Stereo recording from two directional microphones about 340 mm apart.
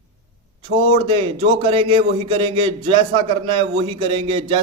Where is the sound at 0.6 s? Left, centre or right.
Centre.